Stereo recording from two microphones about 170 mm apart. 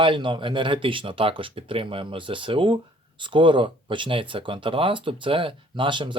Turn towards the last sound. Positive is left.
turn(degrees=-30)  # may be behind; listen again after turning